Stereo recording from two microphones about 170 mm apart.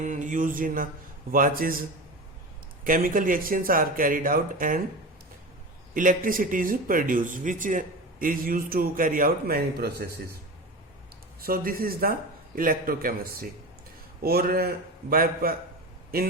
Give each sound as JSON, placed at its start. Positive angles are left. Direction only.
{"t": 0.0, "sound": "speech", "side_deg": -45}
{"t": 2.8, "sound": "speech", "side_deg": -55}
{"t": 5.9, "sound": "speech", "side_deg": -55}
{"t": 11.3, "sound": "speech", "side_deg": -60}